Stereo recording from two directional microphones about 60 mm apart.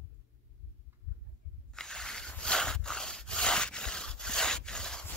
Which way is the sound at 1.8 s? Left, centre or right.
Centre.